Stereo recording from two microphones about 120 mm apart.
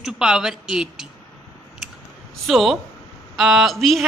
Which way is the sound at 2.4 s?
Centre (ahead or behind).